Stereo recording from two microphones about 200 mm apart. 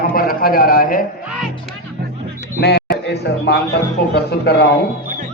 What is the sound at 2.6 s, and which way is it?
A man's voice, 55° left (ahead or behind).